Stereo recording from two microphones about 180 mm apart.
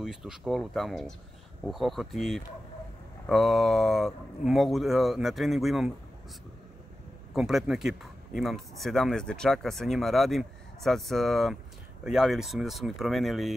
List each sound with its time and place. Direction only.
0.0 s speech: 5° right (ahead or behind)
7.3 s speech: centre (ahead or behind)